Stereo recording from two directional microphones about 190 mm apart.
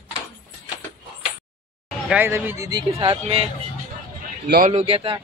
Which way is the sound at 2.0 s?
10° right (ahead or behind).